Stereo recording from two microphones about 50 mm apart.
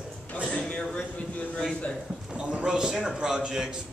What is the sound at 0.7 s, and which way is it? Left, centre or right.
Speech, centre.